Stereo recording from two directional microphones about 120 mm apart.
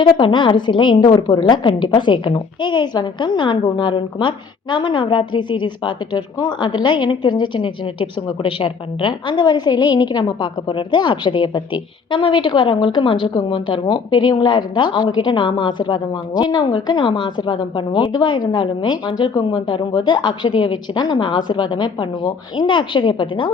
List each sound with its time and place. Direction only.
0.0 s a woman's voice: 40° left (ahead or behind)